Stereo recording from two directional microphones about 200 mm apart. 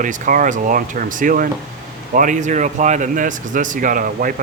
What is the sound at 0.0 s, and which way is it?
Speech, 40° right (ahead or behind).